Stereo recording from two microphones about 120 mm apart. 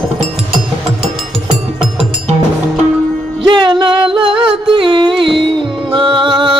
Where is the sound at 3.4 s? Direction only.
40° right (ahead or behind).